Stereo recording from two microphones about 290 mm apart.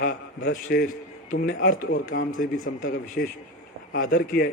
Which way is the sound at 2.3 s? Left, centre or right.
Left.